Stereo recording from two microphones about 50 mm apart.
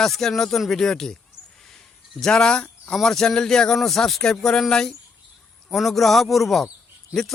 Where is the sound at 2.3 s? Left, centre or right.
Centre.